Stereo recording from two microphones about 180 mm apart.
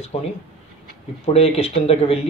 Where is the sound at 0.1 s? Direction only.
35° left (ahead or behind).